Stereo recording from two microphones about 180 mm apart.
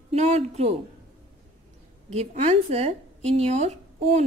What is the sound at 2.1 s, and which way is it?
Speech, 35° right (ahead or behind).